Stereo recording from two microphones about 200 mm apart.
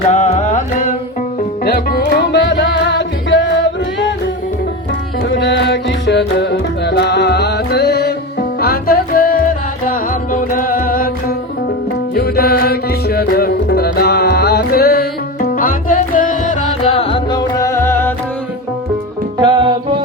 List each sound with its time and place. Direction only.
0.1 s music: 35° left (ahead or behind); by 3.5 s 65° left (ahead or behind)
5.3 s music: 65° left (ahead or behind); by 16.6 s 40° left (ahead or behind)
17.0 s music: 25° left (ahead or behind)
19.4 s music: 25° right (ahead or behind)